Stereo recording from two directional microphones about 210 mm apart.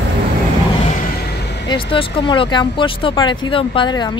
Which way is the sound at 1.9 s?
20° left (ahead or behind).